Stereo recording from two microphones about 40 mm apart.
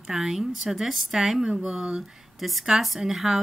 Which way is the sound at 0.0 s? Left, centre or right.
Centre.